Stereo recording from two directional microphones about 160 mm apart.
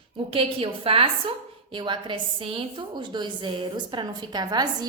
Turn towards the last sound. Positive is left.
turn(degrees=-25)  # may be behind; listen again after turning